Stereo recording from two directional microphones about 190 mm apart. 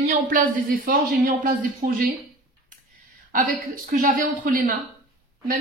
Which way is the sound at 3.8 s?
45° right (ahead or behind).